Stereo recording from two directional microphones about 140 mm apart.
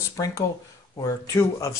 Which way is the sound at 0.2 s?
25° left (ahead or behind).